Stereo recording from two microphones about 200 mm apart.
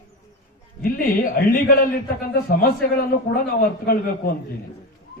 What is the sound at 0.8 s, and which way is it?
Speech, 45° left (ahead or behind).